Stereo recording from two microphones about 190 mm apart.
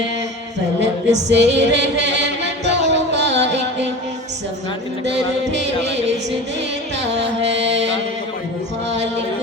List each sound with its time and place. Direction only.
1.1 s music: 65° right (ahead or behind)
5.0 s music: 65° right (ahead or behind)
7.0 s music: 65° right (ahead or behind)